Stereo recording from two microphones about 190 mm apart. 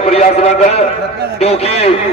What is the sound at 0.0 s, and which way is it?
A man's voice, 30° left (ahead or behind).